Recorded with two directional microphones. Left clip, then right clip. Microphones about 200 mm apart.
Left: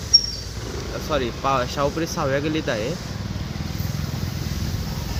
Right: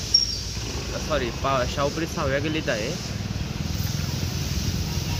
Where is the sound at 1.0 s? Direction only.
55° left (ahead or behind).